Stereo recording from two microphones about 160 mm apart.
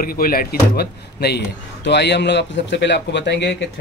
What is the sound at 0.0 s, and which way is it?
Speech, 65° left (ahead or behind).